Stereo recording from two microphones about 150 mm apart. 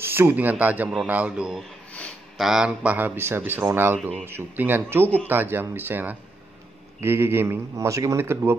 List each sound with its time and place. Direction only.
0.0 s a man's voice: 15° right (ahead or behind)